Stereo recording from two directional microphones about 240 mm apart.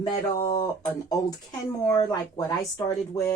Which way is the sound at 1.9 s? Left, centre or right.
Centre.